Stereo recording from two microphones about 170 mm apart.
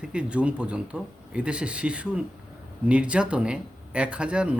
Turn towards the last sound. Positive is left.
turn(degrees=-5)  # may be behind; listen again after turning